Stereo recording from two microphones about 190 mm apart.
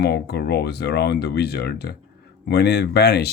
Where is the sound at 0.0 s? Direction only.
60° left (ahead or behind).